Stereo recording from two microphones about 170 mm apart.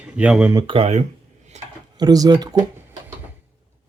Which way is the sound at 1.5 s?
40° right (ahead or behind).